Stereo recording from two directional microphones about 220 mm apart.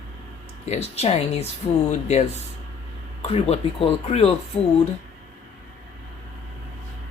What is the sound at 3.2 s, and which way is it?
Speech, 25° left (ahead or behind).